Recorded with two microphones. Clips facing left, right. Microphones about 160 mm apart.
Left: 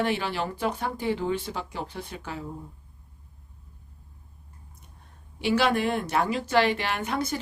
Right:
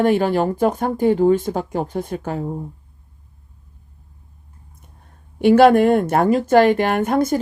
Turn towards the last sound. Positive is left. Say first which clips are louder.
# right 11 dB
turn(degrees=-50)  # may be behind; listen again after turning